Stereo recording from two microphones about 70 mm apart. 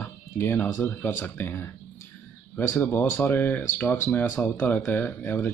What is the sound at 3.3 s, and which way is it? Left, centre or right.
Speech, left.